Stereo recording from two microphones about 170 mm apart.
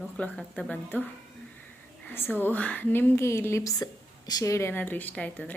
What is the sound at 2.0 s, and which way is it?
A woman's voice, 10° left (ahead or behind).